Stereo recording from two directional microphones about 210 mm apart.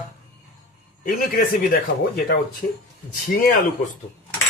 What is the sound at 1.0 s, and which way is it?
Speech, 45° left (ahead or behind).